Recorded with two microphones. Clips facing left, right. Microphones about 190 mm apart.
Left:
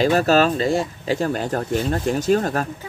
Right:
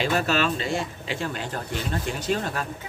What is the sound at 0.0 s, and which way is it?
Speech, 40° left (ahead or behind).